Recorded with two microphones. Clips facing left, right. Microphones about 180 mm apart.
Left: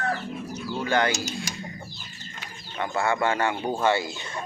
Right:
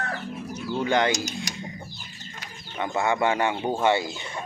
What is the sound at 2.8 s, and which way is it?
Speech, 15° right (ahead or behind).